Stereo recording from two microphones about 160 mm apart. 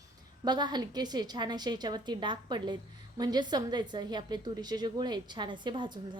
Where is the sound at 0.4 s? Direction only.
25° right (ahead or behind).